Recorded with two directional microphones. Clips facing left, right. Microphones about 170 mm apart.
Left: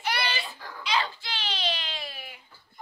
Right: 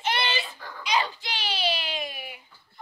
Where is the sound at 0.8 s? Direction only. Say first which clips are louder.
Right 2 dB; 15° right (ahead or behind).